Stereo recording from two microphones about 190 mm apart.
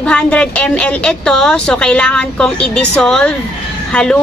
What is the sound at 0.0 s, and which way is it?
Speech, 5° left (ahead or behind).